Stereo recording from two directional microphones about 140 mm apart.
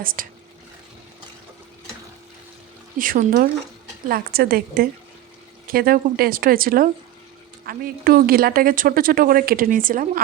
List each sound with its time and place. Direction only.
0.0 s a woman's voice: 90° right
3.0 s a woman's voice: 80° right